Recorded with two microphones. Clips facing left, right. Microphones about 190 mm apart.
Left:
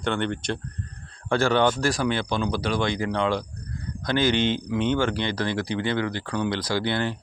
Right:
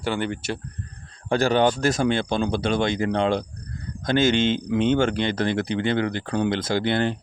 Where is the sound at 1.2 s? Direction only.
15° right (ahead or behind).